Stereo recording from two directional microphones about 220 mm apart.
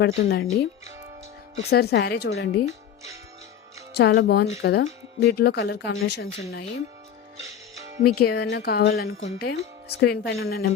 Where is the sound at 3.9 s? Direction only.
50° left (ahead or behind).